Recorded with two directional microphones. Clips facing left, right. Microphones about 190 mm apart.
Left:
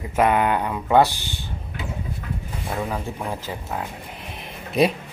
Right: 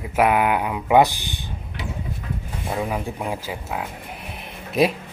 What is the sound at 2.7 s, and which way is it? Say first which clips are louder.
Speech: right 2 dB; 15° right (ahead or behind).